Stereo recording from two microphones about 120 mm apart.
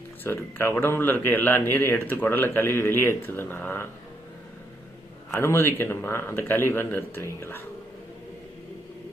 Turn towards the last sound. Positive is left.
turn(degrees=20)  # may be behind; listen again after turning